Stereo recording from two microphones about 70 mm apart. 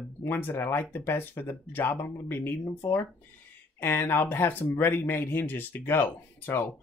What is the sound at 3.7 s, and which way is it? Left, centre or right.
Speech, left.